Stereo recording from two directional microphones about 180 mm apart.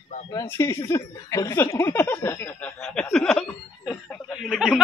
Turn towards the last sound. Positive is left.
turn(degrees=0)  # may be behind; listen again after turning